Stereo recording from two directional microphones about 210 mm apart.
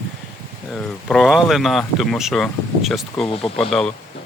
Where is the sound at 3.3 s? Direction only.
25° left (ahead or behind).